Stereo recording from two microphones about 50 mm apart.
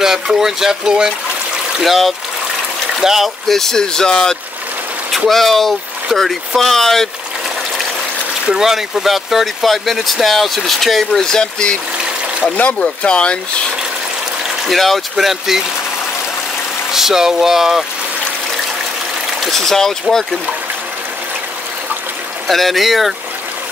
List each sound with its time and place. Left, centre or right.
0.0 s speech: centre
1.8 s speech: centre
3.4 s speech: centre
8.5 s speech: centre
11.1 s speech: centre
12.5 s speech: left
14.6 s speech: centre
16.9 s speech: centre
19.4 s speech: centre
22.5 s speech: centre